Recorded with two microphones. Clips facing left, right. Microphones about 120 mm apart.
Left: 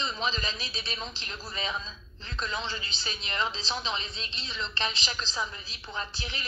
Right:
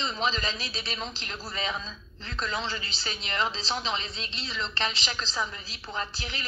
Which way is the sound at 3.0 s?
30° right (ahead or behind).